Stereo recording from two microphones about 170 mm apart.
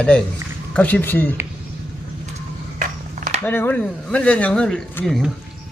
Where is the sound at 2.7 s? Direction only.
45° right (ahead or behind).